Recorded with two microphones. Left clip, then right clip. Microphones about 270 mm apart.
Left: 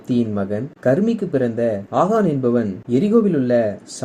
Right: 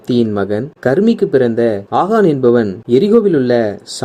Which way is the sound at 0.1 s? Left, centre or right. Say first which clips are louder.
Right 7 dB; right.